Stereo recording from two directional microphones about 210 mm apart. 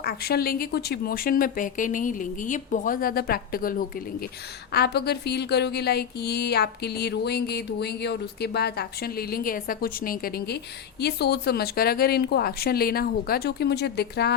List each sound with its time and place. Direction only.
0.0 s speech: 45° left (ahead or behind)